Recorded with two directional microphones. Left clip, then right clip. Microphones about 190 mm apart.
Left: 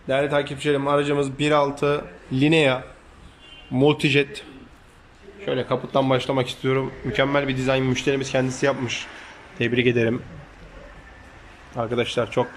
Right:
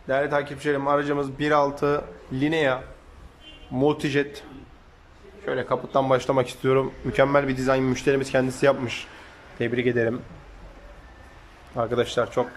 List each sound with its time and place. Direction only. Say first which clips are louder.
0.0 s speech: left 2 dB; 5° left (ahead or behind)
11.7 s speech: even; centre (ahead or behind)